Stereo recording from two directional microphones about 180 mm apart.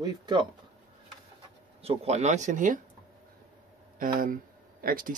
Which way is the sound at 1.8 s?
35° right (ahead or behind).